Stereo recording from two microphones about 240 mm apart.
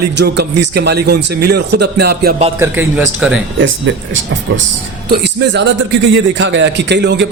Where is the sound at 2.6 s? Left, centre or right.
Centre.